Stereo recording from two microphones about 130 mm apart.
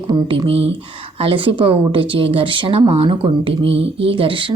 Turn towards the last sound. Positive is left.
turn(degrees=-40)  # may be behind; listen again after turning